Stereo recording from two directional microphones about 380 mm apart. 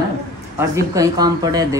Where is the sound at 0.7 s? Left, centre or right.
Centre.